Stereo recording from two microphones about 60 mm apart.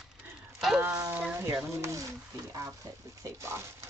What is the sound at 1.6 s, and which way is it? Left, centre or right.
Speech, right.